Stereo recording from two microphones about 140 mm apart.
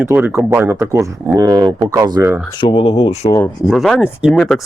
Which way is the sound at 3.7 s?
Centre (ahead or behind).